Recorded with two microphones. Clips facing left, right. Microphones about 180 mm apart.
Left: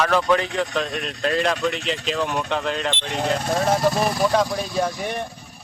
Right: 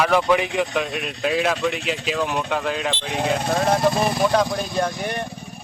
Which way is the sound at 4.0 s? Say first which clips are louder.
Right 1 dB; 25° right (ahead or behind).